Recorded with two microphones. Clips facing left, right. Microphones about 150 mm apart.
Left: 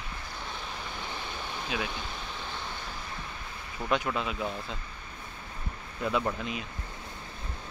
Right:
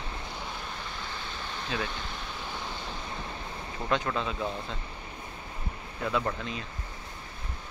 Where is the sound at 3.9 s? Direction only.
10° left (ahead or behind).